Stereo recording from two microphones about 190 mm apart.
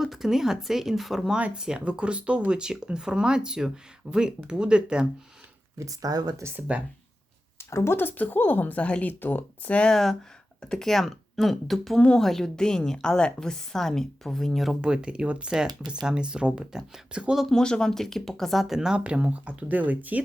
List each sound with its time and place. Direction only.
0.0 s speech: centre (ahead or behind)
5.8 s speech: 20° right (ahead or behind)
7.6 s speech: 15° left (ahead or behind); by 20.2 s 10° right (ahead or behind)